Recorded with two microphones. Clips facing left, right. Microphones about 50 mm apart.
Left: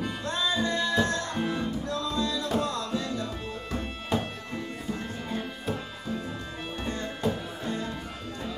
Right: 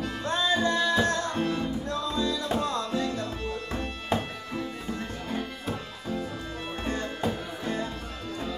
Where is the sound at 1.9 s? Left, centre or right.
Right.